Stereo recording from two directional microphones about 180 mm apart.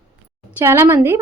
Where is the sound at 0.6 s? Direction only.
15° right (ahead or behind).